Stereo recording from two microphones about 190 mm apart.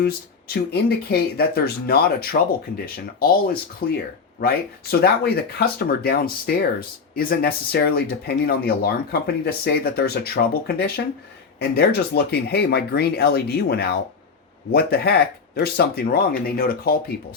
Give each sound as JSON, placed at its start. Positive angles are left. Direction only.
{"t": 0.0, "sound": "speech", "side_deg": 55}